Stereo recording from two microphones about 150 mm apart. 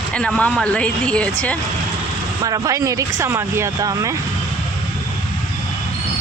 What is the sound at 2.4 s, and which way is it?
Speech, 25° right (ahead or behind).